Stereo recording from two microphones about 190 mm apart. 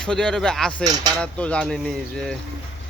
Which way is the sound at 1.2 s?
5° left (ahead or behind).